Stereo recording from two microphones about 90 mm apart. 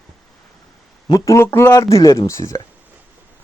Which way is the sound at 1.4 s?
25° left (ahead or behind).